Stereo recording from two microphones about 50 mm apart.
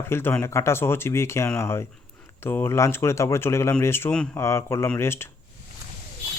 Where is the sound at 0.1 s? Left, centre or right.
Left.